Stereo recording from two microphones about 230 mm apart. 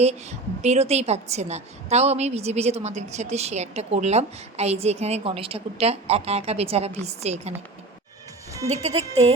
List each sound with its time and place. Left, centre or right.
0.0 s a woman's voice: right
8.6 s a woman's voice: right